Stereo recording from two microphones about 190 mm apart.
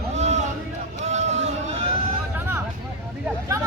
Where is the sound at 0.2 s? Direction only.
40° right (ahead or behind).